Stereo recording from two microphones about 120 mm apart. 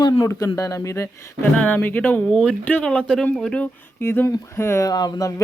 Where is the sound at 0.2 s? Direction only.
25° left (ahead or behind); by 3.7 s 5° left (ahead or behind).